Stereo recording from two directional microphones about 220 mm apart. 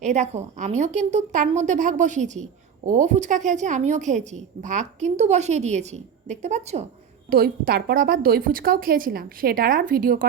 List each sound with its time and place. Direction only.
0.0 s a woman's voice: 30° right (ahead or behind)
7.3 s a woman's voice: 45° right (ahead or behind)